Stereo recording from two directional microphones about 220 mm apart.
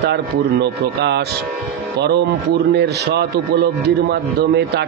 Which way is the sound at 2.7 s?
50° right (ahead or behind).